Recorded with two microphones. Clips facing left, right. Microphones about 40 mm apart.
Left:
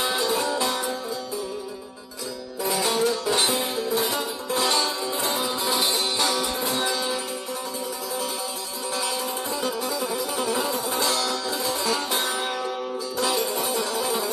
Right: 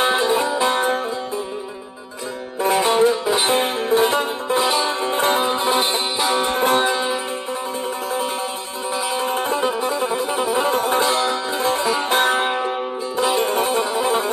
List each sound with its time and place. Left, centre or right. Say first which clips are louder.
0.0 s music: right 6 dB; right
2.6 s music: right 8 dB; right
3.4 s music: right 7 dB; right
4.6 s music: right 4 dB; centre
4.8 s music: right 7 dB; right
9.2 s music: right 7 dB; right
10.6 s music: right 8 dB; right
11.1 s music: right 6 dB; right